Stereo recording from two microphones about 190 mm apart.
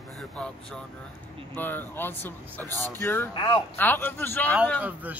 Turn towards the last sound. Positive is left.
turn(degrees=-10)  # may be behind; listen again after turning